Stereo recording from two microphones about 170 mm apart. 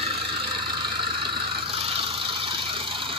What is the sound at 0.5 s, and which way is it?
Vehicle, 25° right (ahead or behind).